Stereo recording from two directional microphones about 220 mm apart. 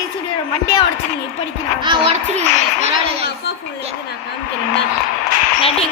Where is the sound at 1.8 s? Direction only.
25° right (ahead or behind).